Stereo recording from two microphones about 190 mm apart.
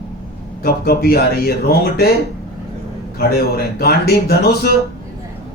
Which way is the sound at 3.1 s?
55° left (ahead or behind).